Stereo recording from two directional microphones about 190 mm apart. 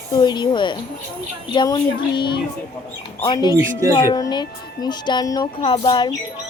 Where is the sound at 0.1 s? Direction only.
25° left (ahead or behind).